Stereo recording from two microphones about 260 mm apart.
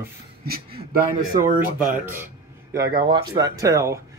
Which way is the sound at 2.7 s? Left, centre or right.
Centre.